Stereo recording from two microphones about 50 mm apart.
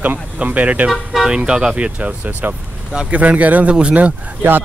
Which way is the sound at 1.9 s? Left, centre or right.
Right.